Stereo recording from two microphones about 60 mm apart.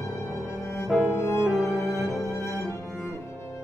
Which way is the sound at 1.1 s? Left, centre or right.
Left.